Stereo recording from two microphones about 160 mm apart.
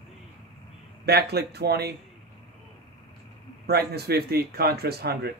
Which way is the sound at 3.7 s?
85° right.